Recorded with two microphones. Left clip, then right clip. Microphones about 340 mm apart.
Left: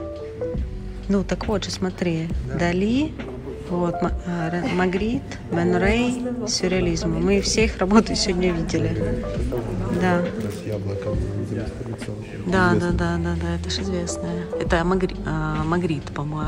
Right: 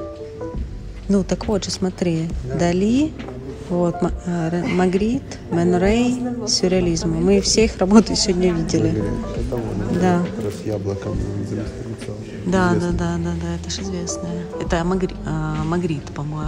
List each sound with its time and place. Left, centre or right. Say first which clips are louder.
1.0 s a woman's voice: right 3 dB; centre
9.9 s a woman's voice: right 2 dB; centre
12.4 s a woman's voice: even; centre